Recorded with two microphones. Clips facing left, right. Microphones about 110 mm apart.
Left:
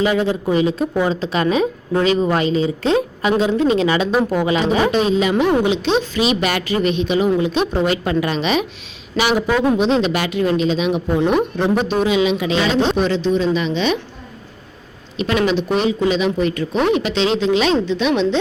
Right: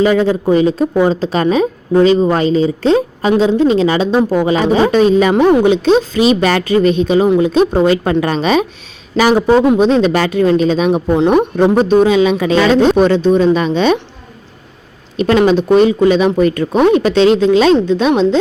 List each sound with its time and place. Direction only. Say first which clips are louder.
0.0 s a woman's voice: right 6 dB; 40° right (ahead or behind)
4.9 s speech: right 6 dB; 45° right (ahead or behind)
5.5 s a woman's voice: right 7 dB; 35° right (ahead or behind)
11.8 s a woman's voice: right 8 dB; 35° right (ahead or behind)
12.5 s speech: right 9 dB; 55° right (ahead or behind)
15.2 s speech: right 7 dB; 45° right (ahead or behind)